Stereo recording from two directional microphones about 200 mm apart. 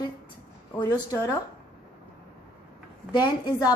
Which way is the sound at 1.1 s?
15° left (ahead or behind).